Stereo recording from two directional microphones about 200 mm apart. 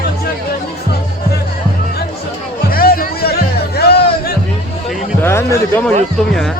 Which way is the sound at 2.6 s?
45° left (ahead or behind).